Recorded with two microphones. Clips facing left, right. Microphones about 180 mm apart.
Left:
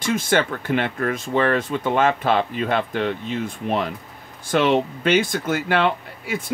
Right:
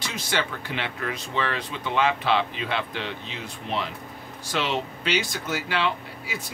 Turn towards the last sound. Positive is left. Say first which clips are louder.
# left 7 dB
turn(degrees=55)  # may be behind; listen again after turning